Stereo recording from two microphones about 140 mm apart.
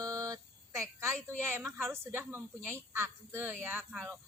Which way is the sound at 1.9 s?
15° right (ahead or behind).